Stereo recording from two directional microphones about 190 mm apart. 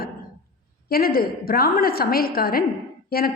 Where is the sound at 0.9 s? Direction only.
50° left (ahead or behind).